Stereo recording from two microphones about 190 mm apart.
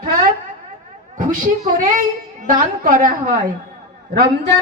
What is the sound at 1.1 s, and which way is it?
A woman's voice, 45° right (ahead or behind).